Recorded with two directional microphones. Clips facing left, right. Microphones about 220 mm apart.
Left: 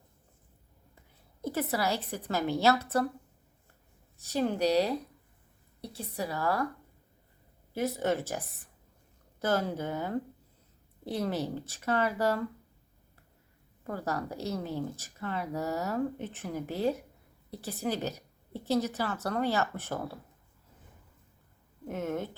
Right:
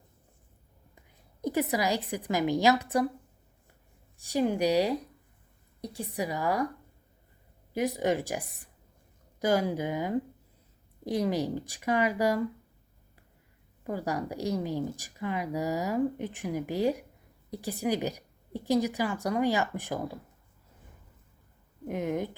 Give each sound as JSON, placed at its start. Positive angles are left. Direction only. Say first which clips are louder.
{"t": 1.4, "sound": "a sound", "louder": "right 4 dB", "side_deg": -15}
{"t": 1.7, "sound": "speech", "louder": "right 2 dB", "side_deg": -15}
{"t": 4.2, "sound": "speech", "louder": "right 2 dB", "side_deg": -15}
{"t": 7.7, "sound": "speech", "louder": "right 2 dB", "side_deg": -15}
{"t": 13.8, "sound": "speech", "louder": "right 2 dB", "side_deg": -15}
{"t": 21.8, "sound": "speech", "louder": "right 3 dB", "side_deg": -15}